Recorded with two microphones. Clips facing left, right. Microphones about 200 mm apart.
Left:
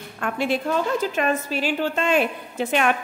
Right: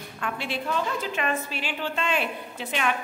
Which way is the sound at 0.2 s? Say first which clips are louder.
Left 7 dB; 45° left (ahead or behind).